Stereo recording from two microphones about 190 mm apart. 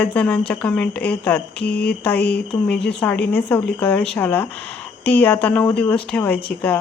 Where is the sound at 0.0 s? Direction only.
5° left (ahead or behind).